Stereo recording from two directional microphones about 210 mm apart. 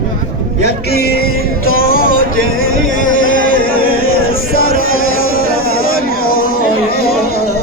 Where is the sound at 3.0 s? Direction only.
40° left (ahead or behind).